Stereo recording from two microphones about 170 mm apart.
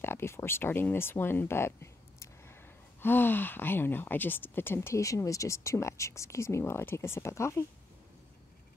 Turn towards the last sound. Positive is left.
turn(degrees=15)  # may be behind; listen again after turning